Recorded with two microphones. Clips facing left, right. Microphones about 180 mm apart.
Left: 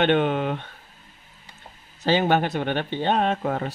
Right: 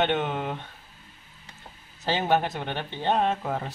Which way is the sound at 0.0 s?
65° left (ahead or behind).